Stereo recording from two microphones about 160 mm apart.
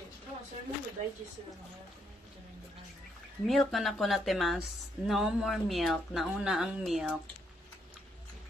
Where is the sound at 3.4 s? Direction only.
Centre (ahead or behind).